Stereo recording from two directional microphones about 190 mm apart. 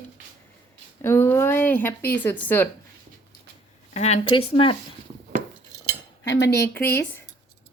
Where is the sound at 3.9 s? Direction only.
35° left (ahead or behind).